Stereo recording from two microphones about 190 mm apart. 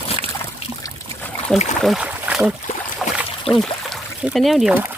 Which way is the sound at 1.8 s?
5° right (ahead or behind).